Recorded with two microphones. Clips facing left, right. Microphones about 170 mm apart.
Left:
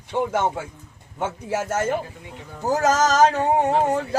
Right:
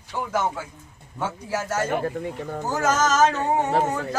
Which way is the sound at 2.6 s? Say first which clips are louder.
Left 4 dB; 35° left (ahead or behind).